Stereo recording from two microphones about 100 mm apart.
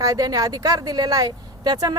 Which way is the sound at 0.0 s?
40° right (ahead or behind).